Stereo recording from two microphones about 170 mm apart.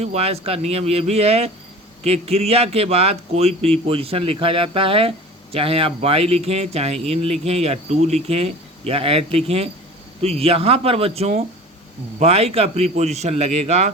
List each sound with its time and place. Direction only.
0.0 s speech: 40° right (ahead or behind)